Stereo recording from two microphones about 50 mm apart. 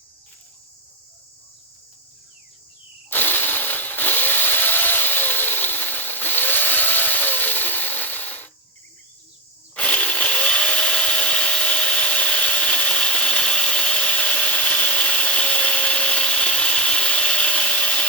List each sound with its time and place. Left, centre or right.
3.1 s chainsaw: left
9.7 s power tool: left